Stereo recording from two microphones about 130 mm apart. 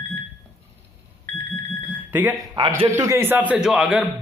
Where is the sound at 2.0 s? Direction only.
15° right (ahead or behind).